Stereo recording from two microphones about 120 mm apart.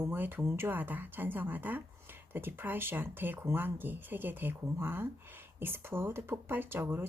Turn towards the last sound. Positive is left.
turn(degrees=-20)  # may be behind; listen again after turning